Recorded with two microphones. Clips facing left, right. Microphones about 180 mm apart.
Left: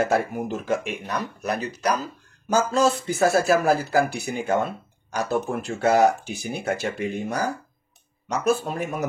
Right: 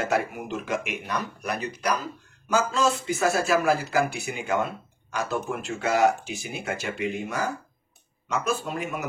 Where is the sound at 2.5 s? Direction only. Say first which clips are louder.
Left 3 dB; 35° left (ahead or behind).